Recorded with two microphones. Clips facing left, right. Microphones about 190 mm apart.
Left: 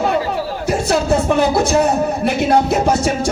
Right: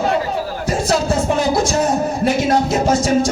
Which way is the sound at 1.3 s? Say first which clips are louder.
Left 2 dB; 65° left (ahead or behind).